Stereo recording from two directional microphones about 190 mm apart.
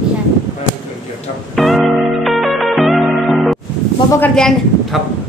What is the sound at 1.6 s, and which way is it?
Music, centre (ahead or behind).